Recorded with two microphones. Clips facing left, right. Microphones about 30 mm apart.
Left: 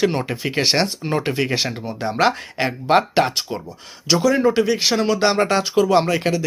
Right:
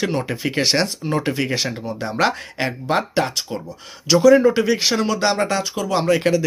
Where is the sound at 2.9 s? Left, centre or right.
Left.